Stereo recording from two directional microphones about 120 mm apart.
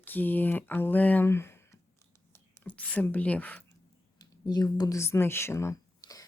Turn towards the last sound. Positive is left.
turn(degrees=30)  # may be behind; listen again after turning